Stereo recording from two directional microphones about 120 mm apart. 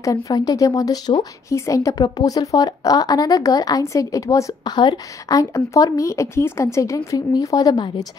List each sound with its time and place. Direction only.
0.0 s a woman's voice: 30° left (ahead or behind)